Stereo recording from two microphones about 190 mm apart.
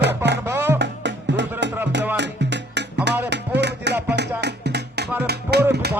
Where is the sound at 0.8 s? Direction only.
65° right (ahead or behind).